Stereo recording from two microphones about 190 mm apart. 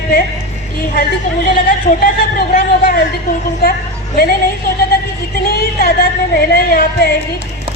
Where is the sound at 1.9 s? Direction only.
45° left (ahead or behind).